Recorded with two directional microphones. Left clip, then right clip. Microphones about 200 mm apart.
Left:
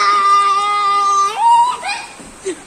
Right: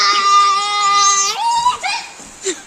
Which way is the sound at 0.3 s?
15° right (ahead or behind).